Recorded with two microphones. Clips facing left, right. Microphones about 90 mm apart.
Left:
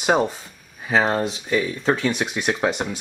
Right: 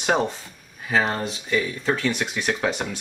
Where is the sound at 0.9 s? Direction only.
20° left (ahead or behind).